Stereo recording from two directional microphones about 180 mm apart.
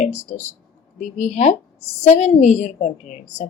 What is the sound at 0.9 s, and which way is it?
A woman's voice, 40° left (ahead or behind).